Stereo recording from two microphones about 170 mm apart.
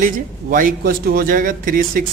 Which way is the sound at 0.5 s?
55° right (ahead or behind).